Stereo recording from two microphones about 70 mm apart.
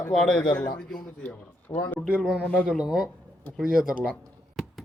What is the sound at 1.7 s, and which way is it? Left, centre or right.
Speech, left.